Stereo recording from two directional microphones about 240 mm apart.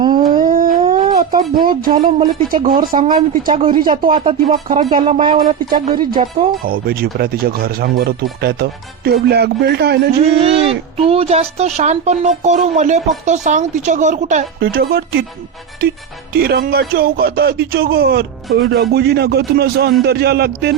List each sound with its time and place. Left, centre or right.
0.4 s dog: right
2.0 s speech: right
3.4 s speech: right
6.7 s speech: right
10.3 s speech: right
16.3 s speech: right